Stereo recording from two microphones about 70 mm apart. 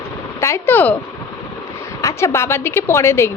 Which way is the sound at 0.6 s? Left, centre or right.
Left.